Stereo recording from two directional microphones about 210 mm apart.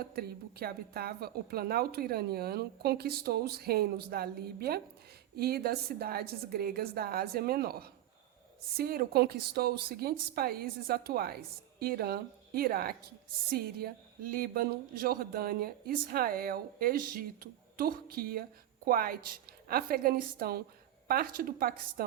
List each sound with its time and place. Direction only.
0.0 s speech: 50° right (ahead or behind)